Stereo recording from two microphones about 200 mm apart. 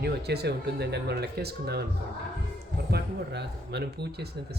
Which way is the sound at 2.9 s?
55° right (ahead or behind).